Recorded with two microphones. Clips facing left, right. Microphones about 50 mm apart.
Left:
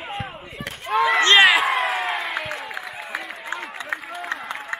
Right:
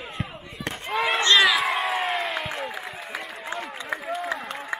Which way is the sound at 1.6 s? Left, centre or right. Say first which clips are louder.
Left 3 dB; left.